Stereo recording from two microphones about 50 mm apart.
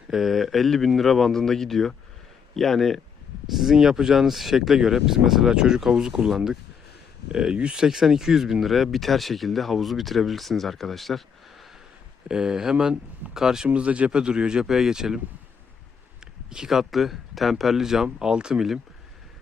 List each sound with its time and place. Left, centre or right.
0.1 s speech: centre
3.5 s speech: centre
12.3 s speech: centre
13.7 s speech: right
16.5 s speech: centre